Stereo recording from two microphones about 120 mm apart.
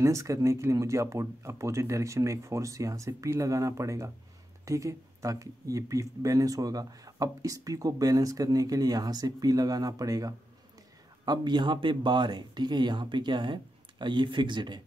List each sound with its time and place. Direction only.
0.0 s speech: 25° right (ahead or behind)